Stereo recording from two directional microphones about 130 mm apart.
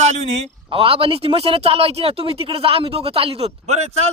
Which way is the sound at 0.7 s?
45° right (ahead or behind).